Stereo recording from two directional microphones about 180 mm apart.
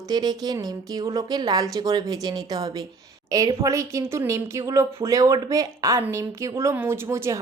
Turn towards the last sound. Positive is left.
turn(degrees=-15)  # may be behind; listen again after turning